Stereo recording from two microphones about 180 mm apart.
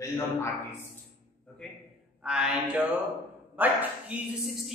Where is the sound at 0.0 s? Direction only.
15° left (ahead or behind).